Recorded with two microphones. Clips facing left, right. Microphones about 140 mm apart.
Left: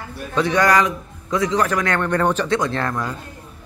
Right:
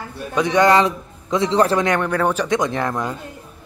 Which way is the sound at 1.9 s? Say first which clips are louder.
Even; 10° right (ahead or behind).